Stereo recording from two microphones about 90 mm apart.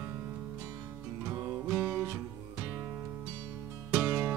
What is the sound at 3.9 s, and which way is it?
Music, 25° right (ahead or behind).